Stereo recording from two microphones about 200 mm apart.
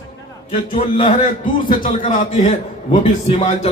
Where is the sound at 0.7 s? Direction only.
35° left (ahead or behind).